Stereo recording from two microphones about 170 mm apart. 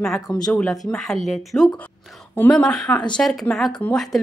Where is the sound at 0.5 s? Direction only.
5° left (ahead or behind).